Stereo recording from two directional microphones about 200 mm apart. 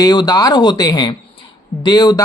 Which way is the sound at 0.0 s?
20° left (ahead or behind).